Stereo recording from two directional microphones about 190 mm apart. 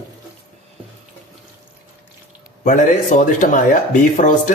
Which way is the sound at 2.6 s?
40° left (ahead or behind).